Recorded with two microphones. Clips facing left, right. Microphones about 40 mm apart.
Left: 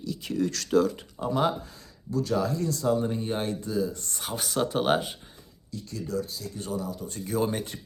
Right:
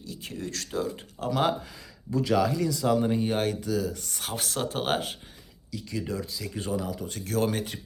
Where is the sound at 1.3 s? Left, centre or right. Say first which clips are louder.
Even; right.